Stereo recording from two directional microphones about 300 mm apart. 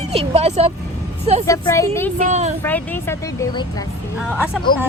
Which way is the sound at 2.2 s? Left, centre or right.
Right.